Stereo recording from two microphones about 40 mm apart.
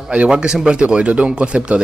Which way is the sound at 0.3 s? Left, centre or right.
Right.